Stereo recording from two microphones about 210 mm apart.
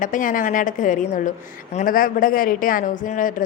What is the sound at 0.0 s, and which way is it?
A woman's voice, 40° left (ahead or behind).